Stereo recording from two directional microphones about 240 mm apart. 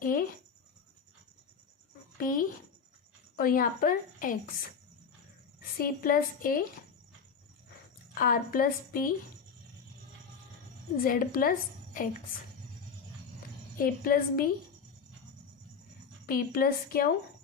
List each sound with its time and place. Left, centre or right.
0.0 s a sound: left
2.1 s a woman's voice: left
5.7 s a woman's voice: left
8.2 s a woman's voice: left
11.0 s a woman's voice: left
13.7 s a woman's voice: left
16.2 s a woman's voice: left